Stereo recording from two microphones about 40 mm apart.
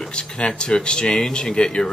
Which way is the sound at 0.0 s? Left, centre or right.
Left.